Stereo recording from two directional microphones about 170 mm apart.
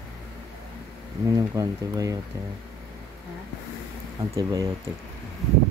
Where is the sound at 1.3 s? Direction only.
20° right (ahead or behind).